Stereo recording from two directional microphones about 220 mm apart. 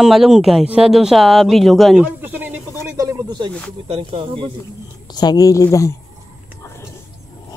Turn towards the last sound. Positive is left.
turn(degrees=10)  # may be behind; listen again after turning